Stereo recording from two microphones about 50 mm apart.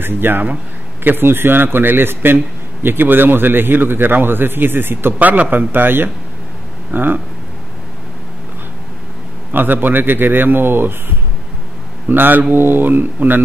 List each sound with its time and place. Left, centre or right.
0.0 s a man's voice: right
5.2 s speech: right
5.7 s a man's voice: right
9.5 s a man's voice: right
12.1 s speech: right